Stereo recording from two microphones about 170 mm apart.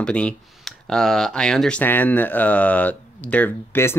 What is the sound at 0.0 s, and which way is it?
Speech, 5° left (ahead or behind).